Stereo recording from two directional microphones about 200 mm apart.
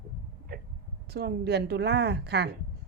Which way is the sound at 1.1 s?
55° right (ahead or behind).